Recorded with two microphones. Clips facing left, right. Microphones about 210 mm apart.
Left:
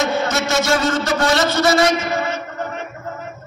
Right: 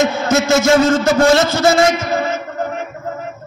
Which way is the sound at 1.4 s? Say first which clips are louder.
Right 2 dB; 25° right (ahead or behind).